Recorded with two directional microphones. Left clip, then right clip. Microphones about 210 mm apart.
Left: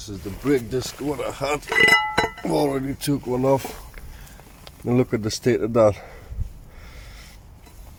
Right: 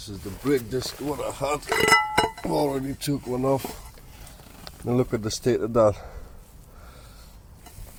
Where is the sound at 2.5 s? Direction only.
10° left (ahead or behind).